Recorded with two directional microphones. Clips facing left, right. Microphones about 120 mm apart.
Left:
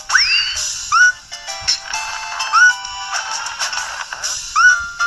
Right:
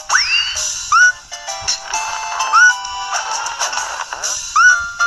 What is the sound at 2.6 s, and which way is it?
Music, 10° right (ahead or behind).